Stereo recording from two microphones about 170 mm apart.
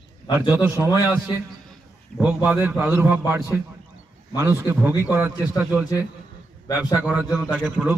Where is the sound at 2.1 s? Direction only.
5° right (ahead or behind).